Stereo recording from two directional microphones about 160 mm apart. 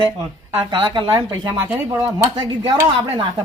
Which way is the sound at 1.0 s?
20° right (ahead or behind).